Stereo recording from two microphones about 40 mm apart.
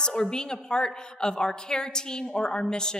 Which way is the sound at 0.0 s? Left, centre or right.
Centre.